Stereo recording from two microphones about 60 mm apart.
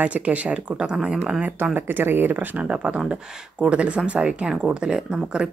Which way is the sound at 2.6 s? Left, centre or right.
Centre.